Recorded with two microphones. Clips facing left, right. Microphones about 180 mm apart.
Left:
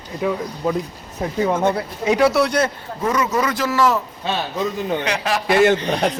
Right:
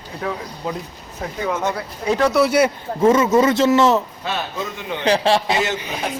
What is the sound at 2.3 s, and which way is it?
Speech, 5° right (ahead or behind).